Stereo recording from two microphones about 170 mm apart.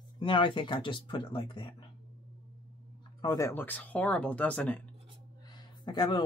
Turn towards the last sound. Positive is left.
turn(degrees=25)  # may be behind; listen again after turning